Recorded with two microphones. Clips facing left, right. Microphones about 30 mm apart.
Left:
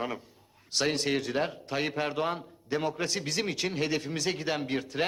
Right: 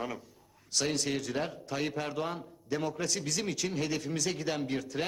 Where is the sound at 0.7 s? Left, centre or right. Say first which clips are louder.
Left 3 dB; left.